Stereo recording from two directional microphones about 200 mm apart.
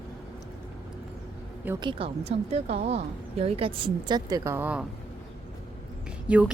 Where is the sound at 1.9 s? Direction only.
30° right (ahead or behind); by 4.9 s 5° right (ahead or behind).